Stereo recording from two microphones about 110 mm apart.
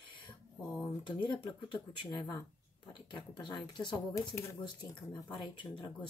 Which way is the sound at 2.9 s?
45° left (ahead or behind).